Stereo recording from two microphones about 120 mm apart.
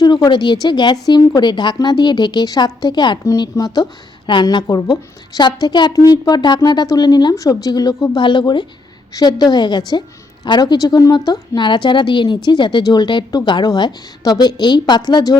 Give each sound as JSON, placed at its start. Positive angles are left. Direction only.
{"t": 0.0, "sound": "a woman's voice", "side_deg": 35}